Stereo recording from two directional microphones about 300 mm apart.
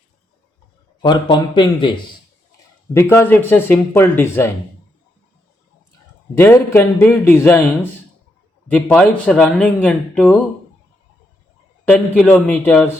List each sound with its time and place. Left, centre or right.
1.0 s speech: centre
6.3 s speech: centre
11.9 s speech: centre